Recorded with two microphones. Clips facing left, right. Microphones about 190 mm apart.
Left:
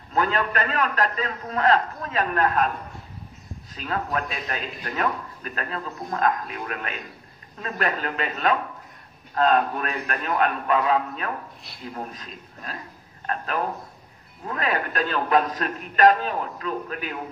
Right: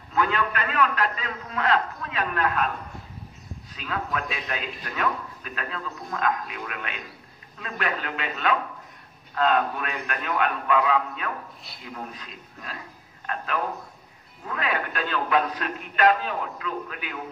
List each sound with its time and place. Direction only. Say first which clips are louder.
0.1 s a man's voice: left 2 dB; 40° left (ahead or behind)
3.7 s a man's voice: left 3 dB; 40° left (ahead or behind)
14.5 s a man's voice: left 2 dB; 40° left (ahead or behind)